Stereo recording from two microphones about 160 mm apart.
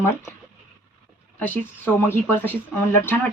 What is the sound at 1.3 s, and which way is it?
Speech, 10° left (ahead or behind).